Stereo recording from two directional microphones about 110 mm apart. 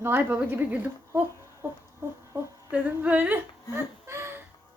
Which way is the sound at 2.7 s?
15° right (ahead or behind).